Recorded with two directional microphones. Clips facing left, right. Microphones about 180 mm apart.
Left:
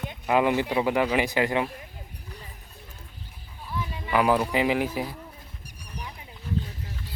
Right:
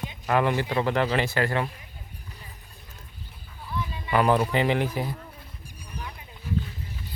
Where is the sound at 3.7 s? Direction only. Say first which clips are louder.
Even; 5° left (ahead or behind).